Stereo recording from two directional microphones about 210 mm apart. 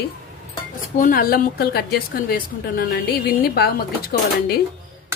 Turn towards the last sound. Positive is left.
turn(degrees=45)  # may be behind; listen again after turning